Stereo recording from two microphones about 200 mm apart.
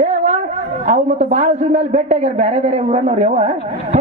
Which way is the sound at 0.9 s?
35° right (ahead or behind).